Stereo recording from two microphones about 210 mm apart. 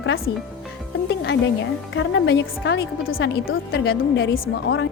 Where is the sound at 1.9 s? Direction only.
60° left (ahead or behind).